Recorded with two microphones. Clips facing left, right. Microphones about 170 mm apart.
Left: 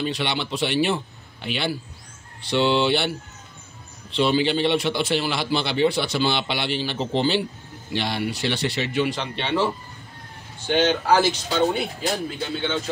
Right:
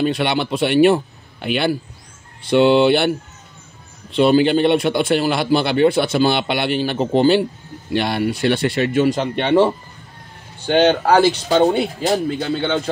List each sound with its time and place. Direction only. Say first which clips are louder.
0.0 s a man's voice: right 7 dB; 55° right (ahead or behind)
10.7 s a man's voice: right 5 dB; 60° right (ahead or behind)
12.4 s a man's voice: right 6 dB; 65° right (ahead or behind)